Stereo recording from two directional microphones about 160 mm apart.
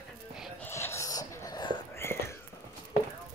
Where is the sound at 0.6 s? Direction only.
15° left (ahead or behind).